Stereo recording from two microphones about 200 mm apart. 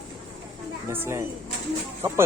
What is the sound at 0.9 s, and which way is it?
Speech, 10° right (ahead or behind).